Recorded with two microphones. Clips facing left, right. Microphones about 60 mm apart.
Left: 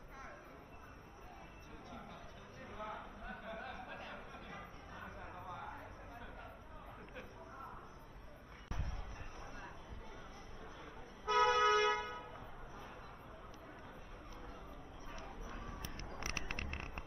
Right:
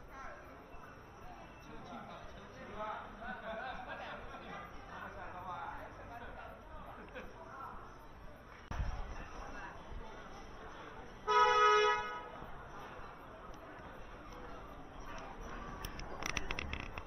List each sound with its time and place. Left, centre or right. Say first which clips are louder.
2.7 s a sound: right 4 dB; right
11.2 s music: right 3 dB; right
15.1 s music: right 2 dB; right